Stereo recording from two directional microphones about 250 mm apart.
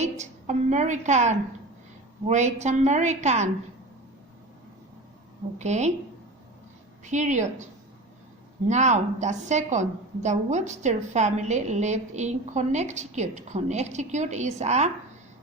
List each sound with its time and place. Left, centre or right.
0.0 s a woman's voice: right
5.5 s a woman's voice: right
7.0 s a woman's voice: right